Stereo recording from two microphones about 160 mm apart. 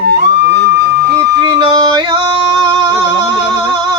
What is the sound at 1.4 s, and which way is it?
Yodeling, 25° right (ahead or behind).